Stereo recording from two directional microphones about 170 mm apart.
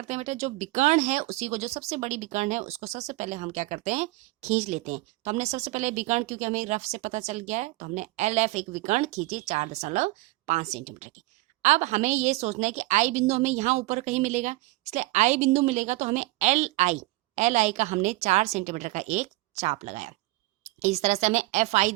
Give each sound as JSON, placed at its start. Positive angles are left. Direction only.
{"t": 0.1, "sound": "a woman's voice", "side_deg": -40}